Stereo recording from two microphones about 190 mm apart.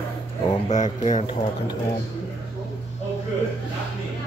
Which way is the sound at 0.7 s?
40° left (ahead or behind).